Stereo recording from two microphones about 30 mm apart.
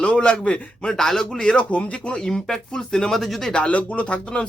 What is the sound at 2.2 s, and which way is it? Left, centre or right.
Speech, left.